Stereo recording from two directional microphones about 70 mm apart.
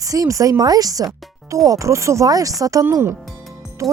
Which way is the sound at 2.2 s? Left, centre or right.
Right.